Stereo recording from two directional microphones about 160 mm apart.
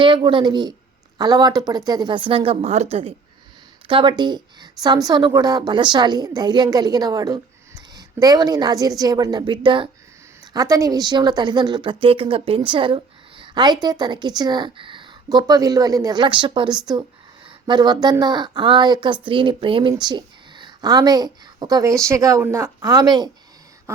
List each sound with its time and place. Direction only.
0.0 s a woman's voice: 30° right (ahead or behind)